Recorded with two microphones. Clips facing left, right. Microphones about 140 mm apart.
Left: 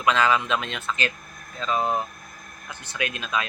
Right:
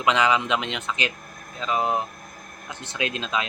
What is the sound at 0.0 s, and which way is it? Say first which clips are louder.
Speech: even; 20° right (ahead or behind).